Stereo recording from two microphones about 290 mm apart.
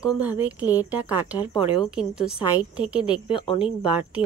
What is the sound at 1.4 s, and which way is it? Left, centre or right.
Speech, centre.